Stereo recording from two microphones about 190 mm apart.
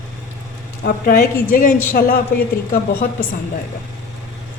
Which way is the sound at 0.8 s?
50° left (ahead or behind).